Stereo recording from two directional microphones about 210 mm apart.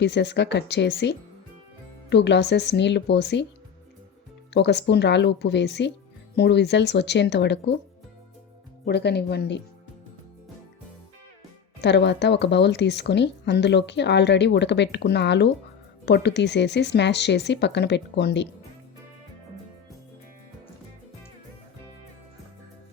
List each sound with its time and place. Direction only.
0.0 s speech: 55° left (ahead or behind)
4.5 s speech: 55° left (ahead or behind)
8.8 s speech: 55° left (ahead or behind)
11.8 s speech: 55° left (ahead or behind)